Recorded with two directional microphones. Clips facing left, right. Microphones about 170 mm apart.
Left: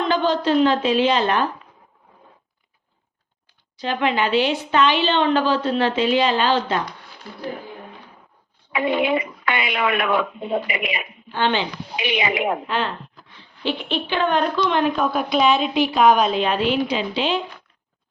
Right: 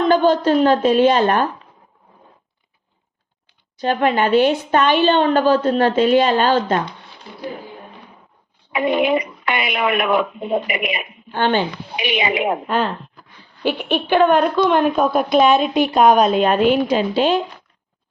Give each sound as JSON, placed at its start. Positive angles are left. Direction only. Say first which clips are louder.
{"t": 0.0, "sound": "a woman's voice", "louder": "right 5 dB", "side_deg": -50}
{"t": 3.8, "sound": "a woman's voice", "louder": "right 4 dB", "side_deg": -50}
{"t": 9.2, "sound": "speech", "louder": "right 2 dB", "side_deg": -20}
{"t": 11.3, "sound": "a woman's voice", "louder": "right 3 dB", "side_deg": -50}
{"t": 11.9, "sound": "speech", "louder": "right 2 dB", "side_deg": -25}
{"t": 12.6, "sound": "a woman's voice", "louder": "right 4 dB", "side_deg": -45}